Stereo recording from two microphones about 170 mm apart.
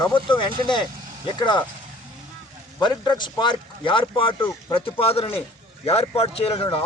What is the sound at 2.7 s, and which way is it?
Speech, 25° left (ahead or behind).